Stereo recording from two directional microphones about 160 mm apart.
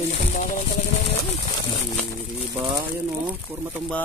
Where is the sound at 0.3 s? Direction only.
45° left (ahead or behind).